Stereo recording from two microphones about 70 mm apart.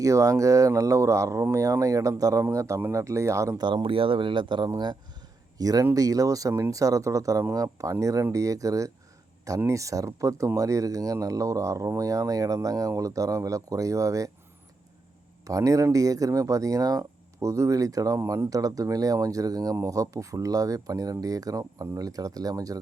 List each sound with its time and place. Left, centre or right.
0.0 s speech: right
2.4 s speech: right
4.5 s speech: right
5.5 s speech: right
15.4 s speech: right